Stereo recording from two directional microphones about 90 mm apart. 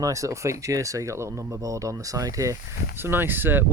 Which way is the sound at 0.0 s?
35° right (ahead or behind).